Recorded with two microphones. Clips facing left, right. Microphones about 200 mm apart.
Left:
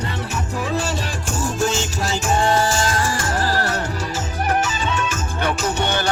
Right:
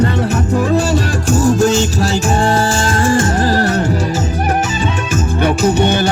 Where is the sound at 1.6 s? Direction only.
35° right (ahead or behind); by 3.7 s 20° right (ahead or behind).